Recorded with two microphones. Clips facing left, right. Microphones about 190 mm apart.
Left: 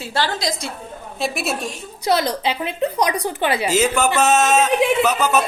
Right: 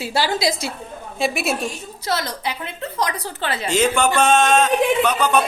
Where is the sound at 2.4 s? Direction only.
20° left (ahead or behind).